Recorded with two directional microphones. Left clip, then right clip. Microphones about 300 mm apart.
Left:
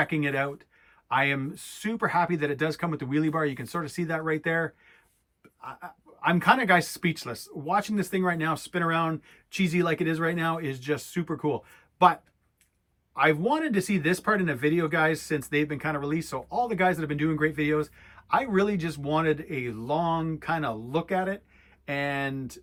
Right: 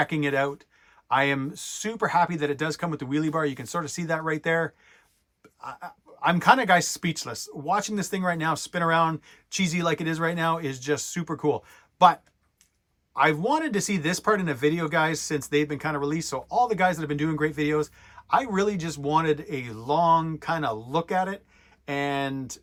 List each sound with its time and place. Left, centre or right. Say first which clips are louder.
0.0 s speech: right 2 dB; centre
13.1 s speech: right 1 dB; centre